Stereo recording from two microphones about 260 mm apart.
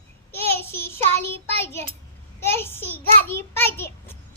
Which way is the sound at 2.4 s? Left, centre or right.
Centre.